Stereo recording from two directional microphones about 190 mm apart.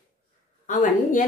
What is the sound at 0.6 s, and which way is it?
Speech, 40° left (ahead or behind).